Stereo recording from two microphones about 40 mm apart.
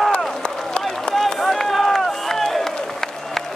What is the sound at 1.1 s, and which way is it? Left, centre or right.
Run, centre.